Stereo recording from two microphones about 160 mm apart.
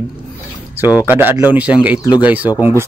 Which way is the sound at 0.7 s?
10° right (ahead or behind).